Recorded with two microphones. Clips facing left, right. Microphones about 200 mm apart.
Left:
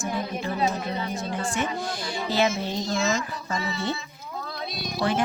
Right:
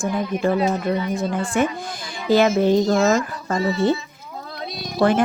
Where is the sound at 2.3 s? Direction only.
50° right (ahead or behind).